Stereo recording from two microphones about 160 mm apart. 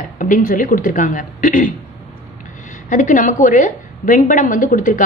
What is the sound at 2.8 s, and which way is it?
A woman's voice, 55° left (ahead or behind).